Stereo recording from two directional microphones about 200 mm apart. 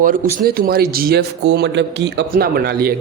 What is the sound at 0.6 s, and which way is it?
A man's voice, 50° right (ahead or behind).